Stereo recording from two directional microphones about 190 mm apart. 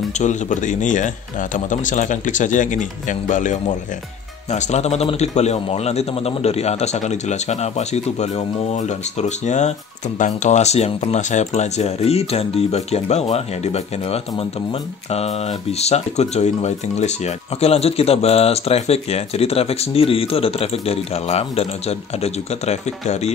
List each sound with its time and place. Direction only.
0.2 s a man's voice: 40° left (ahead or behind)